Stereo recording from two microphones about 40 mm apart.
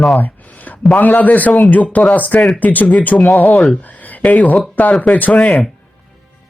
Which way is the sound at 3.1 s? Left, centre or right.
Centre.